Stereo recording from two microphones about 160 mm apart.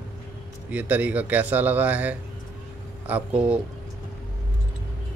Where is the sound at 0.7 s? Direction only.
10° right (ahead or behind).